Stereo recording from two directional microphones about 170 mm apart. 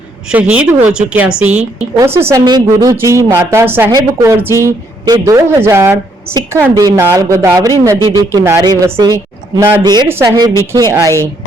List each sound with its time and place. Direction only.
0.3 s a woman's voice: 5° right (ahead or behind)
9.8 s a woman's voice: 25° right (ahead or behind)